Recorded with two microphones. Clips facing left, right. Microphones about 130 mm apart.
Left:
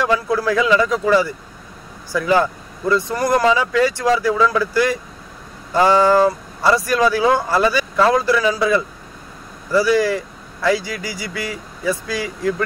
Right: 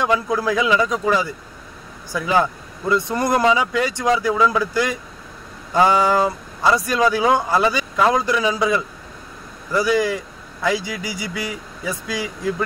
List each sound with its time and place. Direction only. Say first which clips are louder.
0.0 s speech: left 1 dB; 20° right (ahead or behind)